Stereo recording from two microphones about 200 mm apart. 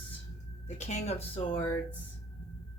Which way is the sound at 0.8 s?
35° left (ahead or behind).